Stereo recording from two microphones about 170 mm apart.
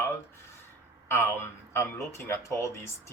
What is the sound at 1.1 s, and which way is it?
Speech, 15° left (ahead or behind).